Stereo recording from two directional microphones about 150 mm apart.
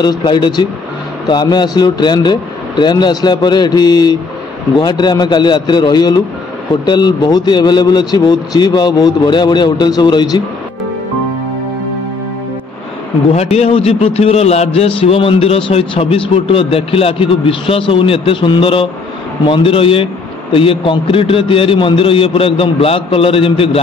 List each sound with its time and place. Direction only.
0.0 s speech: 30° left (ahead or behind)
13.3 s a man's voice: 45° left (ahead or behind)